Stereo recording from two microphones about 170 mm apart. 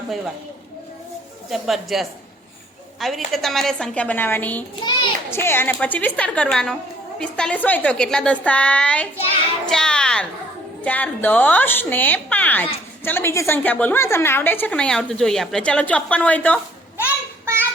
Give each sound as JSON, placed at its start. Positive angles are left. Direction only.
{"t": 1.5, "sound": "a woman's voice", "side_deg": 0}
{"t": 4.8, "sound": "a child's voice", "side_deg": 25}
{"t": 5.3, "sound": "a woman's voice", "side_deg": 15}
{"t": 9.6, "sound": "a sound", "side_deg": 5}
{"t": 10.8, "sound": "a woman's voice", "side_deg": 10}
{"t": 17.4, "sound": "a sound", "side_deg": -15}